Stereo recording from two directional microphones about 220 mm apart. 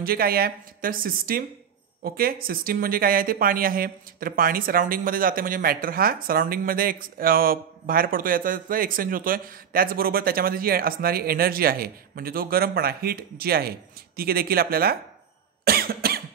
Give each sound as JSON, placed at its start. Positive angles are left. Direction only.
{"t": 0.0, "sound": "speech", "side_deg": -40}
{"t": 15.6, "sound": "cough", "side_deg": -45}